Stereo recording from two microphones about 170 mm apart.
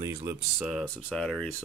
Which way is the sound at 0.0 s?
20° right (ahead or behind).